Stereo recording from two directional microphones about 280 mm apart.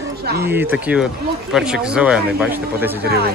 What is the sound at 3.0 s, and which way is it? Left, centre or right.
Speech, right.